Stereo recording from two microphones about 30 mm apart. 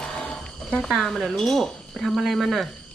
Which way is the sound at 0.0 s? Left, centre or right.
Left.